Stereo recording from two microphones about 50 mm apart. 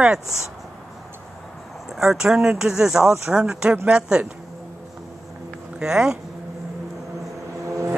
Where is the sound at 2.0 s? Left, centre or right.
Centre.